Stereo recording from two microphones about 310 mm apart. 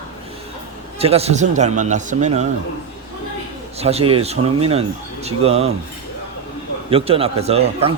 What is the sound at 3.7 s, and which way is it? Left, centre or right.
Speech, centre.